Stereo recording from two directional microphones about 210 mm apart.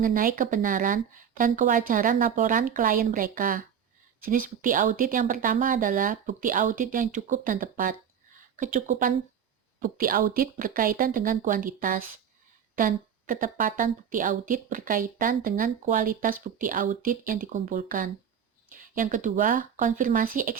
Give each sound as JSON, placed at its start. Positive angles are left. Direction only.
{"t": 0.0, "sound": "a woman's voice", "side_deg": -40}